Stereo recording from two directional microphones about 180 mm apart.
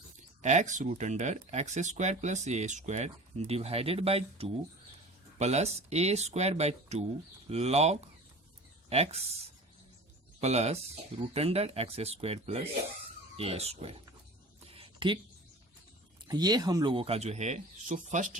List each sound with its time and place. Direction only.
0.4 s speech: 40° right (ahead or behind)
10.4 s speech: 35° right (ahead or behind)
14.7 s a sound: 30° right (ahead or behind)
16.3 s speech: 20° right (ahead or behind); by 18.3 s 45° right (ahead or behind)